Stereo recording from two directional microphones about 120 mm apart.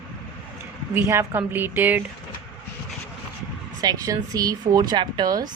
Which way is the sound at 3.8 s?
30° right (ahead or behind).